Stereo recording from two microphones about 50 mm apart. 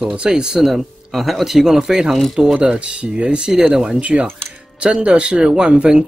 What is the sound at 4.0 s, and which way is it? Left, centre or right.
Speech, right.